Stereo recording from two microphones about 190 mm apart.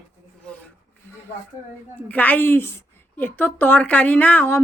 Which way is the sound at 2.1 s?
10° left (ahead or behind).